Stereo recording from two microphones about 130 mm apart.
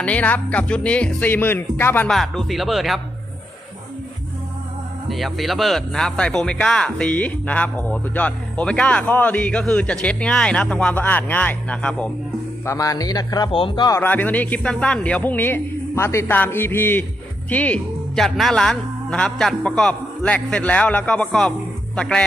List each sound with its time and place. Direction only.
0.0 s speech: 10° left (ahead or behind)
2.0 s speech: centre (ahead or behind)
5.0 s speech: centre (ahead or behind)
12.6 s a man's voice: 25° left (ahead or behind)
13.9 s speech: 15° left (ahead or behind)